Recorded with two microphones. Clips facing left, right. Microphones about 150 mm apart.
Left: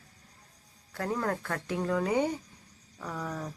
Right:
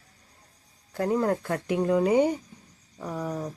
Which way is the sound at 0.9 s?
20° right (ahead or behind).